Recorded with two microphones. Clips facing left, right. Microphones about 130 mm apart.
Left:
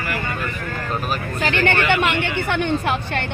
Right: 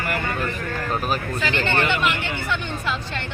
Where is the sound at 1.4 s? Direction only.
60° left (ahead or behind).